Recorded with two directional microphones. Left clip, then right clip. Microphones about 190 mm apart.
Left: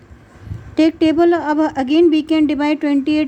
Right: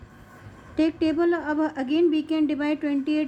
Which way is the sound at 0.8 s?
45° left (ahead or behind).